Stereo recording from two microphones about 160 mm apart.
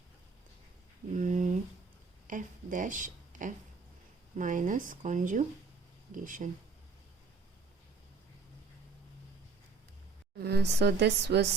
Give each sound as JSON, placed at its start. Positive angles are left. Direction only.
{"t": 1.1, "sound": "a sound", "side_deg": -50}
{"t": 4.4, "sound": "speech", "side_deg": -55}
{"t": 10.3, "sound": "speech", "side_deg": -90}